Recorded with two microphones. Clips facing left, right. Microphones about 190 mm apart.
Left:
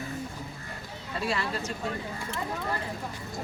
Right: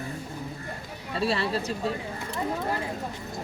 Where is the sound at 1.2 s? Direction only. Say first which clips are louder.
Right 4 dB; 30° right (ahead or behind).